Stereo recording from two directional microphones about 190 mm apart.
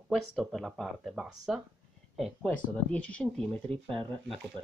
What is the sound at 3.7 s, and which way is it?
Speech, 30° right (ahead or behind).